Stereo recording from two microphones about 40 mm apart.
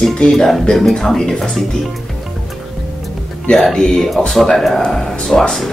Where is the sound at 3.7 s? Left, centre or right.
Centre.